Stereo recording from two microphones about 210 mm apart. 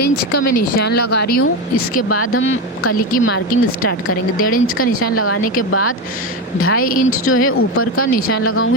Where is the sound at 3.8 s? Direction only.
90° left.